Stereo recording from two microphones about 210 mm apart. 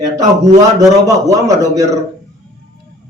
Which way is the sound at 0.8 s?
15° right (ahead or behind).